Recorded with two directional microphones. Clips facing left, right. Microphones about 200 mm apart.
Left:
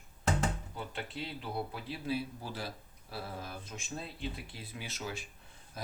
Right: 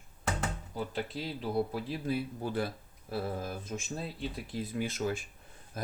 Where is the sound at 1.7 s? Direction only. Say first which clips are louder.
Right 3 dB; 50° right (ahead or behind).